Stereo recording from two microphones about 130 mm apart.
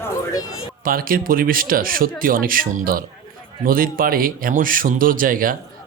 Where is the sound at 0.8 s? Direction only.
90° right.